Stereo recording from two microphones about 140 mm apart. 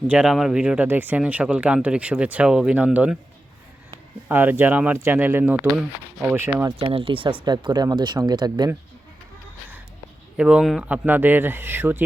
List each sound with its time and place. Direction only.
0.1 s speech: 5° right (ahead or behind)
4.3 s speech: 15° right (ahead or behind)
6.7 s speech: 40° right (ahead or behind)
10.3 s speech: 5° right (ahead or behind)